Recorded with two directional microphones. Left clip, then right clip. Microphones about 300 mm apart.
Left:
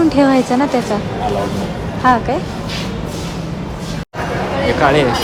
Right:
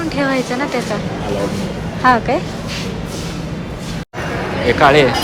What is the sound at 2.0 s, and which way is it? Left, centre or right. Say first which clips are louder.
Speech: right 1 dB; centre.